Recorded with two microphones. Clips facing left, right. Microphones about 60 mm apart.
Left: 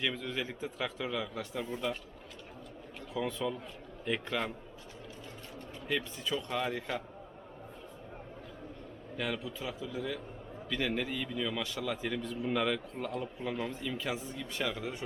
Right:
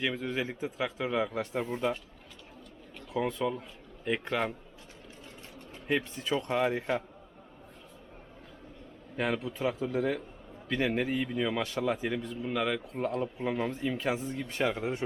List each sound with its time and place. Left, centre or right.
0.0 s speech: right
1.1 s speech: right
3.2 s speech: right
4.0 s a man's voice: centre
5.9 s speech: right
9.1 s speech: right
10.7 s speech: right
12.0 s a man's voice: centre
12.4 s speech: centre
12.9 s speech: right
13.4 s speech: right